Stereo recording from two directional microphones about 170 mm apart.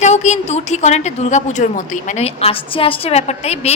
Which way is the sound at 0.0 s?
45° left (ahead or behind).